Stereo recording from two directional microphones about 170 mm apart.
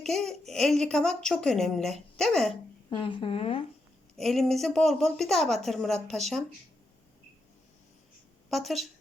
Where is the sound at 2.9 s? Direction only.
30° left (ahead or behind).